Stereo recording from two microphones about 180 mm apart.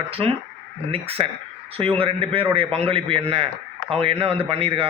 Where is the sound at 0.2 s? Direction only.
30° right (ahead or behind).